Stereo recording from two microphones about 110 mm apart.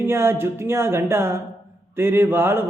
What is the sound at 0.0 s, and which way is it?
Speech, 20° right (ahead or behind).